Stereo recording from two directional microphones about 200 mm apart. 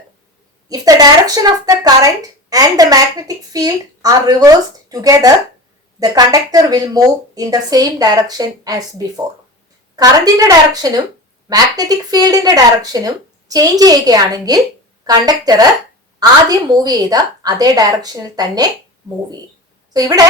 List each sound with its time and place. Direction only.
0.7 s speech: 20° right (ahead or behind)
19.9 s speech: 20° right (ahead or behind)